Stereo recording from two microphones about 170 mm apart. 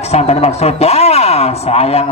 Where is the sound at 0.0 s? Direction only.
40° left (ahead or behind).